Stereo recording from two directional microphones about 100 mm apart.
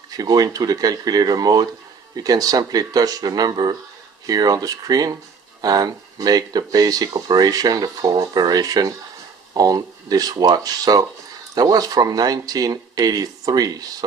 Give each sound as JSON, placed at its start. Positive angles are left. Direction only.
{"t": 0.1, "sound": "speech", "side_deg": -40}